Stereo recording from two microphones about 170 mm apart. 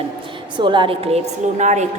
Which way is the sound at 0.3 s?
30° right (ahead or behind).